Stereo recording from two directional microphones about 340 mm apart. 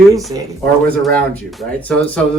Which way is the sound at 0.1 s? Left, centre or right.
Centre.